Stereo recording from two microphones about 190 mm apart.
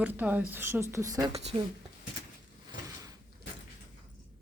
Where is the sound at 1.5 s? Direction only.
30° right (ahead or behind).